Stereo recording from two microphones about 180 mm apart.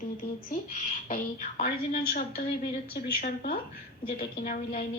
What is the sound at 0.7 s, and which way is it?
Speech, 45° left (ahead or behind).